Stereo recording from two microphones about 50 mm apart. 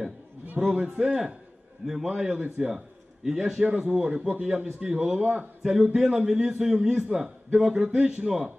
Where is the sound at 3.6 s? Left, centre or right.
Centre.